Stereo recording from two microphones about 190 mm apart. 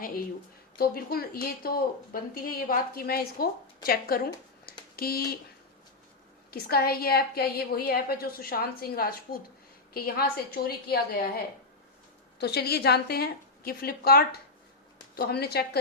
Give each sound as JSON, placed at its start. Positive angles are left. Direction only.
{"t": 0.8, "sound": "a woman's voice", "side_deg": 50}
{"t": 6.5, "sound": "a woman's voice", "side_deg": 55}
{"t": 12.4, "sound": "a woman's voice", "side_deg": 60}